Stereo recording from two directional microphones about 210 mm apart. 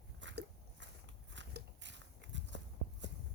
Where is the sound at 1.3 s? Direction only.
60° right (ahead or behind).